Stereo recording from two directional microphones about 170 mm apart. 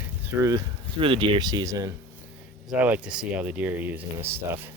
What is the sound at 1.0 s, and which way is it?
Speech, 30° right (ahead or behind).